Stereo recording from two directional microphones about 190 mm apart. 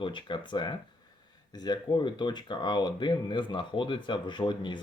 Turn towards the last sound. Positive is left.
turn(degrees=25)  # may be behind; listen again after turning